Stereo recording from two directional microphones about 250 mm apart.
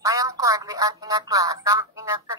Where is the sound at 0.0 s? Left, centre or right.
Centre.